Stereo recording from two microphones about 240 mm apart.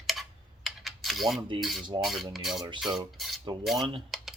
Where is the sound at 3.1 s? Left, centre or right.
Centre.